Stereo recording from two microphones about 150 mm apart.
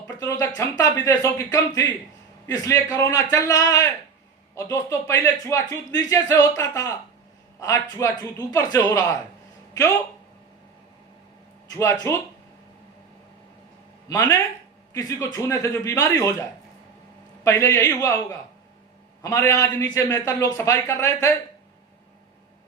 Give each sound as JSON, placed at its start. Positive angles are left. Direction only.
{"t": 0.1, "sound": "speech", "side_deg": 20}
{"t": 11.8, "sound": "speech", "side_deg": 20}
{"t": 14.1, "sound": "speech", "side_deg": 20}
{"t": 17.4, "sound": "speech", "side_deg": 20}